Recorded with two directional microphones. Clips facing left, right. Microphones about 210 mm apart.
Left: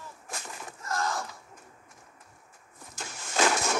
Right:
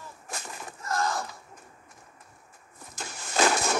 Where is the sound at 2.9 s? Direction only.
35° right (ahead or behind).